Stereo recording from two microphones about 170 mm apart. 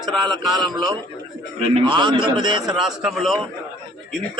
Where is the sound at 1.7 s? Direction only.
30° right (ahead or behind).